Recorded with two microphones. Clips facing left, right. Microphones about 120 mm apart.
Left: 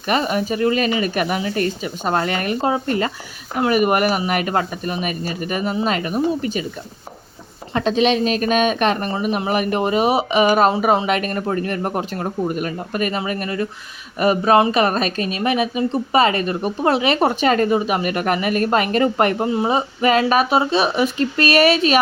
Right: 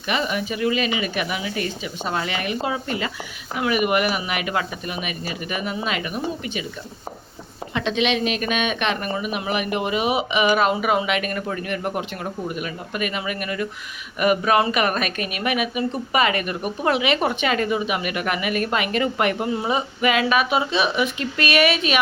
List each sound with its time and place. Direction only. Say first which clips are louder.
0.1 s speech: left 5 dB; 40° left (ahead or behind)
7.7 s speech: left 5 dB; 40° left (ahead or behind)